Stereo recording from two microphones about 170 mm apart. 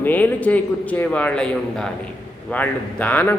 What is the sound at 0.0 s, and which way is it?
A man's voice, 10° left (ahead or behind).